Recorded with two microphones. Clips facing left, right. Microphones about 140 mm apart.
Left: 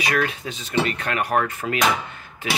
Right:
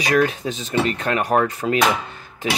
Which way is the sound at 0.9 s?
25° right (ahead or behind).